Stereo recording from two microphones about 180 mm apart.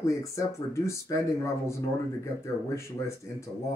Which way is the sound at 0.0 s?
15° left (ahead or behind).